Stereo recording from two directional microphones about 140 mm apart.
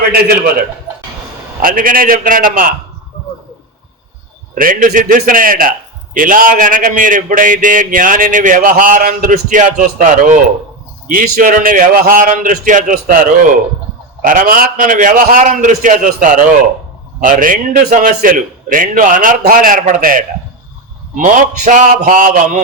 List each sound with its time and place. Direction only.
1.6 s a man's voice: 85° right
4.5 s a man's voice: 80° right
6.1 s speech: 75° right (ahead or behind)
9.3 s speech: 65° right (ahead or behind)
14.2 s speech: 85° right
21.2 s speech: 65° right (ahead or behind)